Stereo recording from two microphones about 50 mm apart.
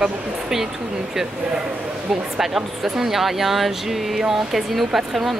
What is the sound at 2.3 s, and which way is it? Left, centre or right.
Speech, centre.